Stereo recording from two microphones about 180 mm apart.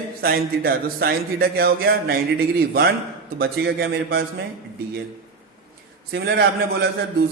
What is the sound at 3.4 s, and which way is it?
Speech, 60° right (ahead or behind).